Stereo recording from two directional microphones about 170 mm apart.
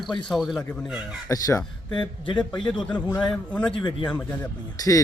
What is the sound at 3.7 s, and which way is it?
Speech, 30° left (ahead or behind).